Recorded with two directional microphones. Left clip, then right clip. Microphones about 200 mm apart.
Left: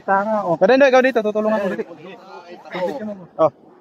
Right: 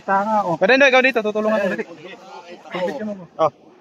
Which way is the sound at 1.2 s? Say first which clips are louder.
Left 1 dB; centre (ahead or behind).